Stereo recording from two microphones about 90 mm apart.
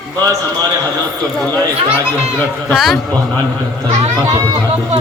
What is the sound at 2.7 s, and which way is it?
Speech, centre (ahead or behind).